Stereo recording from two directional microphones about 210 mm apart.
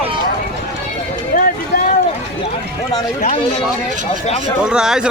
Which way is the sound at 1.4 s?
45° left (ahead or behind).